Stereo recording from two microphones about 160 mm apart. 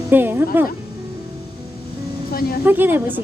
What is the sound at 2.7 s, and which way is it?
Speech, 10° right (ahead or behind).